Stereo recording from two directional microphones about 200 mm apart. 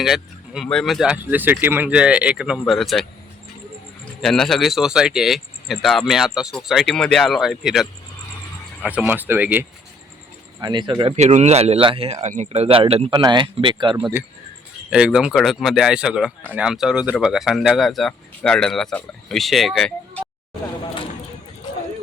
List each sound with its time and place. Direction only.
0.0 s speech: centre (ahead or behind)
4.2 s speech: centre (ahead or behind)
10.6 s speech: 20° right (ahead or behind)
14.0 s speech: 10° right (ahead or behind)